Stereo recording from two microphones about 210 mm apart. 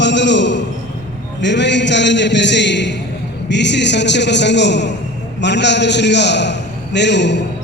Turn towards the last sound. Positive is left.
turn(degrees=55)  # may be behind; listen again after turning